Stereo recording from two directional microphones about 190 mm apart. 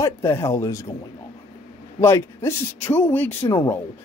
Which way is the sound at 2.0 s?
15° left (ahead or behind).